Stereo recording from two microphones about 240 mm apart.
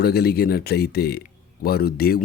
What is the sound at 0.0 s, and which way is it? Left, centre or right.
Speech, left.